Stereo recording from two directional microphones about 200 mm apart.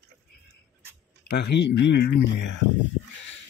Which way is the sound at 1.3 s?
55° left (ahead or behind).